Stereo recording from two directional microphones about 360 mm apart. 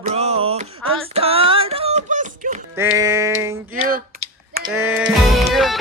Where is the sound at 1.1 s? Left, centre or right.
Centre.